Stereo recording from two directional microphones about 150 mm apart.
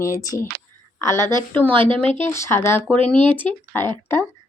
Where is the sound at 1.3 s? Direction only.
10° left (ahead or behind).